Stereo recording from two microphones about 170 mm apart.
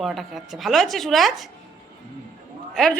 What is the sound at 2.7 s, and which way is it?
Speech, 5° left (ahead or behind).